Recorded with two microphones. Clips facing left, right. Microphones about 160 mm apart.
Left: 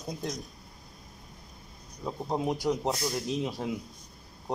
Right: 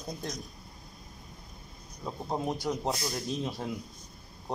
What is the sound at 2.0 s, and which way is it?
A man's voice, 5° left (ahead or behind).